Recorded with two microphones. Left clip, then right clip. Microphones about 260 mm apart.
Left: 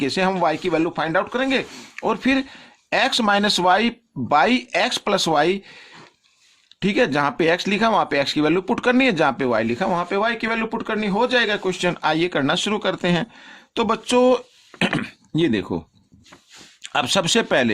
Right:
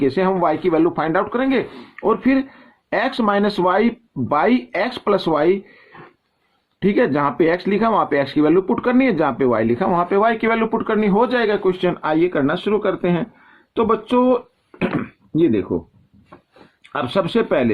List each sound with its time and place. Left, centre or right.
0.0 s speech: left
2.0 s speech: left
6.7 s speech: left
16.8 s speech: left